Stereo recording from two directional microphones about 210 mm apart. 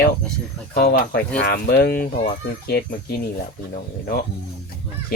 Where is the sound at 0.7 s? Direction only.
50° left (ahead or behind).